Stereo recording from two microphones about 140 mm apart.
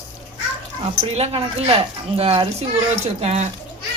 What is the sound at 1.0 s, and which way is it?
Speech, 50° right (ahead or behind).